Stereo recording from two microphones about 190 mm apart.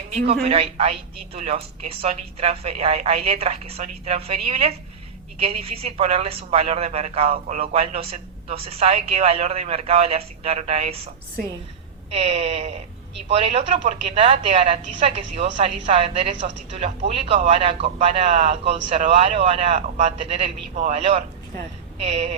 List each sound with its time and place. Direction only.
0.1 s a man's voice: 35° right (ahead or behind)
12.1 s a woman's voice: 35° right (ahead or behind)